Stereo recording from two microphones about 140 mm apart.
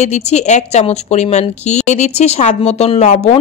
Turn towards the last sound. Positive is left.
turn(degrees=55)  # may be behind; listen again after turning